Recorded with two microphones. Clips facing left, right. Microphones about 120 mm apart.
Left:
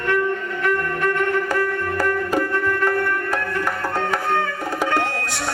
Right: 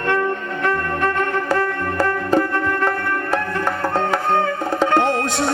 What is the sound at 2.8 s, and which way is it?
Music, 25° right (ahead or behind).